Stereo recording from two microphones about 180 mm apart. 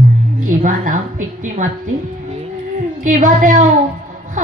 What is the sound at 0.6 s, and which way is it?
A woman's voice, 45° right (ahead or behind).